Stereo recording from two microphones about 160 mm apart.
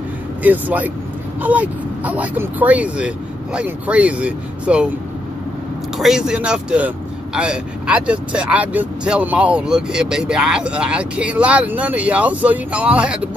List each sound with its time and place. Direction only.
0.4 s speech: 10° right (ahead or behind)
5.9 s speech: 5° right (ahead or behind)